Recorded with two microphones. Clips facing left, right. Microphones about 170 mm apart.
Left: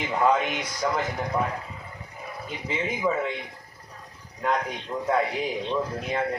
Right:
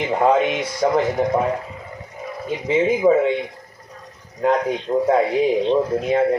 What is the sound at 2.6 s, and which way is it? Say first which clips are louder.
Speech: right 11 dB; 30° right (ahead or behind).